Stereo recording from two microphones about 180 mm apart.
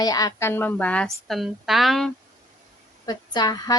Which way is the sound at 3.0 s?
25° left (ahead or behind).